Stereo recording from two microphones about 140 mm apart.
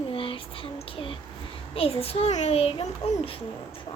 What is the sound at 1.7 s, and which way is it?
A child's voice, 45° left (ahead or behind).